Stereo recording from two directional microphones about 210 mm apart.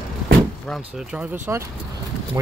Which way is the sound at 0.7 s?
10° right (ahead or behind).